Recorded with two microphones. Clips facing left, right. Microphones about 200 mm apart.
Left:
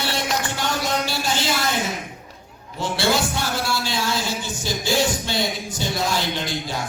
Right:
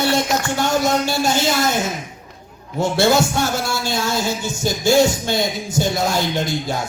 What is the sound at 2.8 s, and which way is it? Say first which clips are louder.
Speech: right 6 dB; 45° right (ahead or behind).